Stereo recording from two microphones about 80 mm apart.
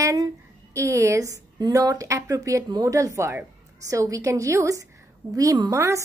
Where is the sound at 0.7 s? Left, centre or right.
Right.